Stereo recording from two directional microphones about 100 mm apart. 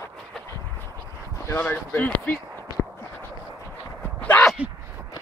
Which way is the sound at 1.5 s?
20° left (ahead or behind).